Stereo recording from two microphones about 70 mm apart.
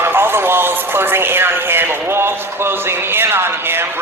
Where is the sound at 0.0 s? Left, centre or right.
Right.